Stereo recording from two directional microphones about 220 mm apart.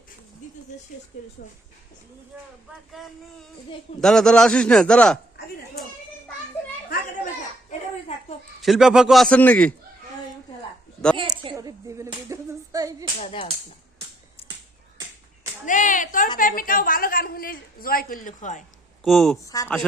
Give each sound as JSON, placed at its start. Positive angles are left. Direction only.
{"t": 2.3, "sound": "speech", "side_deg": -5}
{"t": 4.0, "sound": "a man's voice", "side_deg": 5}
{"t": 6.9, "sound": "a child's voice", "side_deg": 40}
{"t": 8.6, "sound": "a man's voice", "side_deg": 0}
{"t": 11.2, "sound": "a sound", "side_deg": -20}
{"t": 13.1, "sound": "speech", "side_deg": 25}
{"t": 14.4, "sound": "finger snapping", "side_deg": 25}
{"t": 15.6, "sound": "a woman's voice", "side_deg": 35}
{"t": 19.0, "sound": "a man's voice", "side_deg": 0}
{"t": 19.4, "sound": "speech", "side_deg": 15}